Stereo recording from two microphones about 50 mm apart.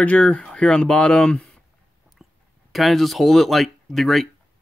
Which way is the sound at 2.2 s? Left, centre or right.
Centre.